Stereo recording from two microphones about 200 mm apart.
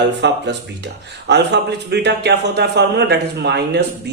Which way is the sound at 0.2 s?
60° right (ahead or behind).